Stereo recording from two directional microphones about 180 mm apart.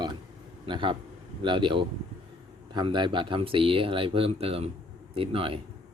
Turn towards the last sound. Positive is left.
turn(degrees=-30)  # may be behind; listen again after turning